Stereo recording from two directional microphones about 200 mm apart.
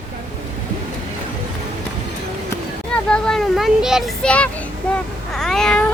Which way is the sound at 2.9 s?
5° left (ahead or behind).